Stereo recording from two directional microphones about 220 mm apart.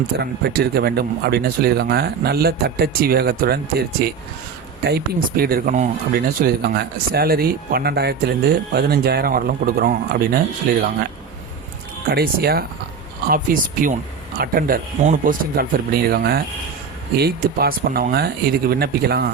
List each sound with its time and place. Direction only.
0.2 s speech: 45° right (ahead or behind)
12.1 s speech: 45° right (ahead or behind)